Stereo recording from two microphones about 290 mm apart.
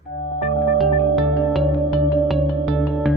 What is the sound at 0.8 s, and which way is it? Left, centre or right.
Music, centre.